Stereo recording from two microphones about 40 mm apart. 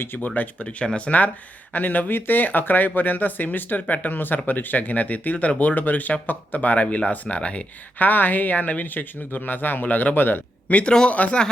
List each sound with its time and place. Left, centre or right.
0.2 s speech: left
0.9 s speech: left
1.7 s speech: left
4.1 s speech: left
7.9 s speech: left
10.7 s speech: left